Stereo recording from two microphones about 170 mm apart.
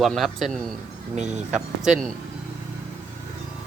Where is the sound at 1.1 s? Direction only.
45° right (ahead or behind).